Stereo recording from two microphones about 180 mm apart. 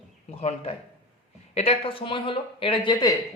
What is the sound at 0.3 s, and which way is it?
A man's voice, 35° left (ahead or behind).